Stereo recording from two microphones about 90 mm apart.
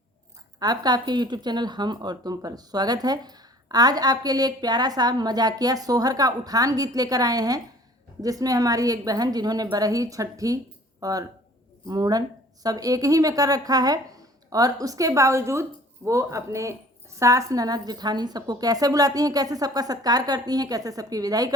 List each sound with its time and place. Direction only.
0.6 s speech: 45° right (ahead or behind)